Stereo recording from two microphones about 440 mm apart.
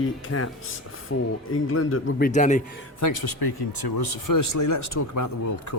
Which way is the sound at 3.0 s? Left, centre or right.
Left.